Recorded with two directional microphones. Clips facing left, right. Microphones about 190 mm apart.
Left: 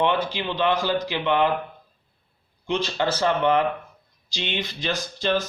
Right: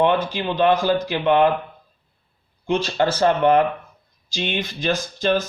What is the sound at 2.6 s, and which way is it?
Speech, 50° right (ahead or behind).